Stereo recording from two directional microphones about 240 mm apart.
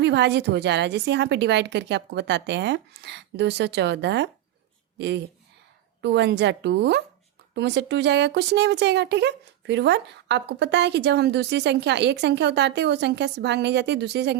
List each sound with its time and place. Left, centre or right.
0.0 s speech: right